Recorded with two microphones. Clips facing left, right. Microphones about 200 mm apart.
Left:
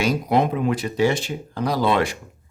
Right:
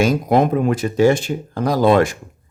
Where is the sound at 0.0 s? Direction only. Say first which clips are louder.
Right 4 dB; 45° right (ahead or behind).